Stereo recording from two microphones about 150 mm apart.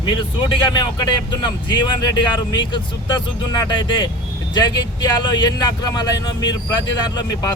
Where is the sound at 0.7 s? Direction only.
30° left (ahead or behind).